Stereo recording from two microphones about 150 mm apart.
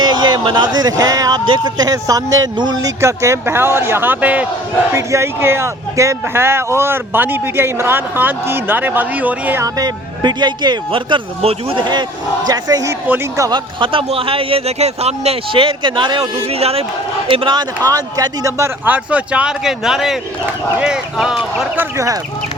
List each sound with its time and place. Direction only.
0.0 s speech: 30° right (ahead or behind); by 9.6 s 10° right (ahead or behind)
9.6 s speech: 25° right (ahead or behind)
13.7 s a man's voice: 35° right (ahead or behind); by 21.8 s 5° right (ahead or behind)
21.9 s speech: 20° right (ahead or behind)